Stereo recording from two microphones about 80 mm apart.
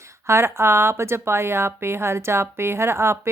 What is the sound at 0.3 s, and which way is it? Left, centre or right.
A woman's voice, right.